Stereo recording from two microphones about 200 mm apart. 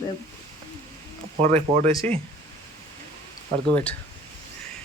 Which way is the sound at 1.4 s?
35° right (ahead or behind).